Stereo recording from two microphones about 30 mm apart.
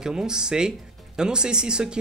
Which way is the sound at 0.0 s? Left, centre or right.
Right.